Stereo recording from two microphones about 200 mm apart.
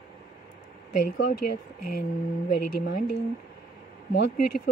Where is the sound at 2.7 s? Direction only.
50° left (ahead or behind).